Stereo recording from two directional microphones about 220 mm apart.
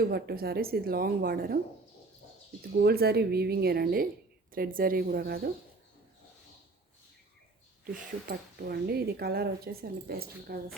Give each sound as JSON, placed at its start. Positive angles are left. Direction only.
{"t": 0.0, "sound": "speech", "side_deg": -45}
{"t": 2.7, "sound": "a woman's voice", "side_deg": -45}
{"t": 8.3, "sound": "speech", "side_deg": -45}